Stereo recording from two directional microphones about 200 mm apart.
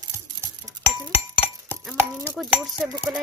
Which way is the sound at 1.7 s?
10° right (ahead or behind).